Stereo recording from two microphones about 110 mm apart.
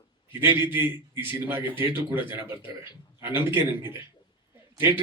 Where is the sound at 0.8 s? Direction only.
20° right (ahead or behind).